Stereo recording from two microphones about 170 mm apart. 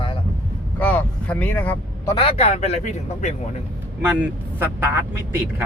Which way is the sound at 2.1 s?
35° left (ahead or behind).